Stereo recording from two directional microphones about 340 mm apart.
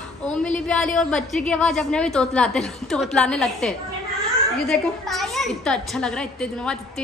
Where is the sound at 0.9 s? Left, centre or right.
Centre.